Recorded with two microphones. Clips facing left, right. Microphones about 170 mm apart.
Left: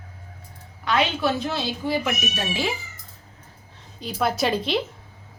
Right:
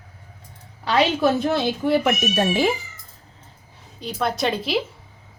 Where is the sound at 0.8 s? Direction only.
35° right (ahead or behind); by 2.7 s 50° right (ahead or behind).